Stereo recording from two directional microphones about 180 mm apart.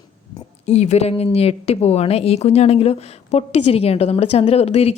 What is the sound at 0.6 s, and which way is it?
Speech, 35° left (ahead or behind).